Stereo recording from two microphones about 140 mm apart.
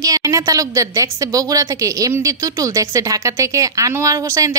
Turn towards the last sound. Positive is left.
turn(degrees=-20)  # may be behind; listen again after turning